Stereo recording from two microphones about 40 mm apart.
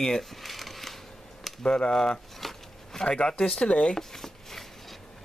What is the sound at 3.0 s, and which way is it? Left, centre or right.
Speech, left.